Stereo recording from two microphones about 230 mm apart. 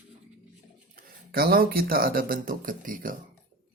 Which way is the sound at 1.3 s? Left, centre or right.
Right.